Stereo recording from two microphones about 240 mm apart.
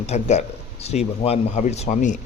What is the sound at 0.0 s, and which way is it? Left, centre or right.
Speech, left.